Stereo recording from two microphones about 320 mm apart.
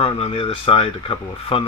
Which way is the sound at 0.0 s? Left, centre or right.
Centre.